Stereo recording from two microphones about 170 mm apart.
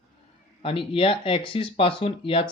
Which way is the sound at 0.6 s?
30° left (ahead or behind).